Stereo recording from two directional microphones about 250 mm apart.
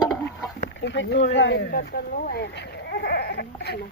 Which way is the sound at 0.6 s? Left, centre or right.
Left.